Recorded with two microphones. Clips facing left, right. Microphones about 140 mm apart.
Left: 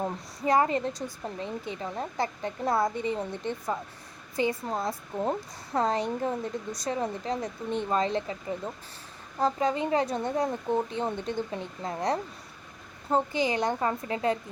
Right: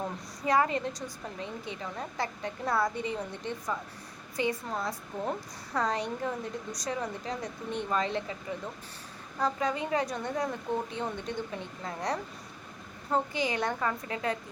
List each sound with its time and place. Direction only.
0.0 s a woman's voice: 25° left (ahead or behind)